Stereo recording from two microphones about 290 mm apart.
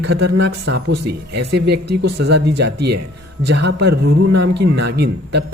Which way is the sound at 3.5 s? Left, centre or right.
Right.